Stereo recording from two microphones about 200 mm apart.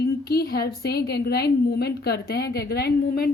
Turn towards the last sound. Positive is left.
turn(degrees=50)  # may be behind; listen again after turning